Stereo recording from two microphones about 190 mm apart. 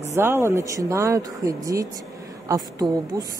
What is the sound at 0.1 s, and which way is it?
A woman's voice, 15° right (ahead or behind).